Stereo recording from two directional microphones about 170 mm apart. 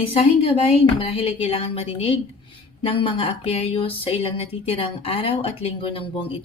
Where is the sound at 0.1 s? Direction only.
35° left (ahead or behind).